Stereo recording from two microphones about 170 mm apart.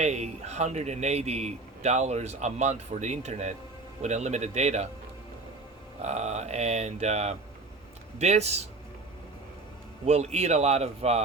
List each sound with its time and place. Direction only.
0.0 s a man's voice: 40° right (ahead or behind)
6.0 s a man's voice: 40° right (ahead or behind)
10.1 s a man's voice: 40° right (ahead or behind)